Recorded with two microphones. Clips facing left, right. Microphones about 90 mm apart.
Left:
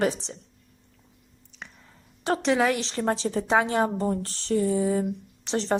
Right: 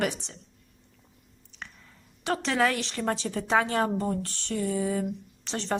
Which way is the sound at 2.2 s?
30° left (ahead or behind).